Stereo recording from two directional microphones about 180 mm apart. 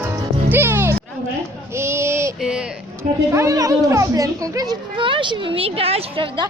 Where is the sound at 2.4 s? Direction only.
5° right (ahead or behind).